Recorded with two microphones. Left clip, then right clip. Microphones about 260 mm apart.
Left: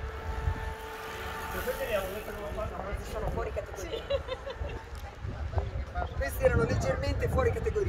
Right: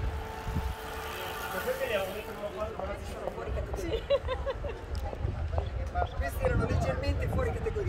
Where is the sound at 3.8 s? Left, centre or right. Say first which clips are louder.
Right 6 dB; centre.